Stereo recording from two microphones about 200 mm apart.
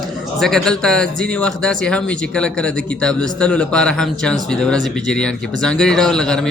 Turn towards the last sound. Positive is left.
turn(degrees=5)  # may be behind; listen again after turning